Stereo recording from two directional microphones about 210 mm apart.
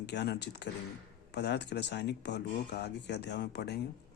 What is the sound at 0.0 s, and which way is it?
Speech, 55° left (ahead or behind).